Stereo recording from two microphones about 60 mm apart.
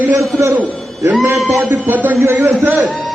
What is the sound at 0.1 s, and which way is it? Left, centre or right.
Speech, right.